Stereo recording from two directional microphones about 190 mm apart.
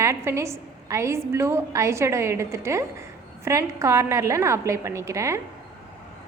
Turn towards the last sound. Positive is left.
turn(degrees=-15)  # may be behind; listen again after turning